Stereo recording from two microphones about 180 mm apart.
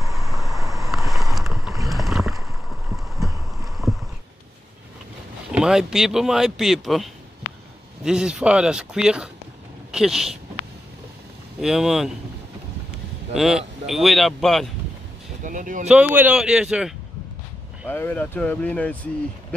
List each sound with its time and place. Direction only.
0.3 s vehicle: centre (ahead or behind)
0.6 s vehicle: 20° right (ahead or behind)
0.9 s boat: centre (ahead or behind)
3.2 s clip-clop: centre (ahead or behind)
5.5 s speech: 5° right (ahead or behind)
11.6 s speech: 5° right (ahead or behind)
13.3 s speech: centre (ahead or behind)
15.4 s speech: 45° right (ahead or behind)
16.2 s speech: 5° right (ahead or behind)
17.8 s speech: 10° left (ahead or behind)